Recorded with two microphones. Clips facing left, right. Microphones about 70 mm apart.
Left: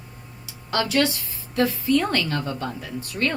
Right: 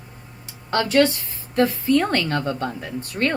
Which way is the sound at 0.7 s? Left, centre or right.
Right.